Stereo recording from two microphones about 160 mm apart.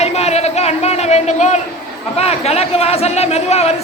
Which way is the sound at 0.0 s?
40° left (ahead or behind).